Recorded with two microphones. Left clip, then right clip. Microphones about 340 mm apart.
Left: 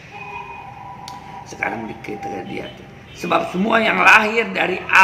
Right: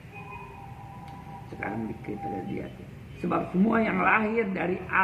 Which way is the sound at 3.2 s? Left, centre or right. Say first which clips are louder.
Left 9 dB; left.